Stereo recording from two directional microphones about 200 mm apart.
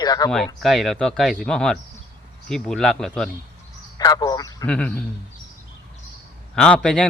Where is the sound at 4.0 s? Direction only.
20° left (ahead or behind).